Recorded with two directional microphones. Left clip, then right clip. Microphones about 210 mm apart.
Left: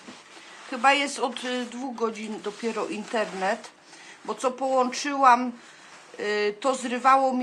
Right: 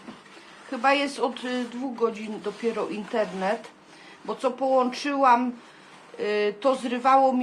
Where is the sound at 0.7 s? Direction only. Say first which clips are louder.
Left 1 dB; 20° left (ahead or behind).